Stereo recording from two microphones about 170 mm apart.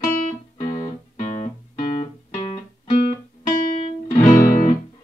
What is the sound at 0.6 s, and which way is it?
Music, 40° left (ahead or behind).